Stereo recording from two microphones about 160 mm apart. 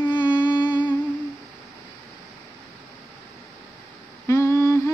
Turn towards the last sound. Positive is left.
turn(degrees=15)  # may be behind; listen again after turning